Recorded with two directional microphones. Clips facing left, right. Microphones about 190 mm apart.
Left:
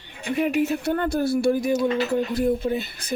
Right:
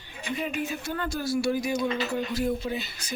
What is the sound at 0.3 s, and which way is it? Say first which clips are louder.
Speech: left 10 dB; 70° left (ahead or behind).